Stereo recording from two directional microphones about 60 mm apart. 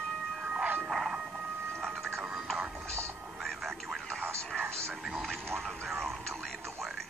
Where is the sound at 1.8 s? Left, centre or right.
Centre.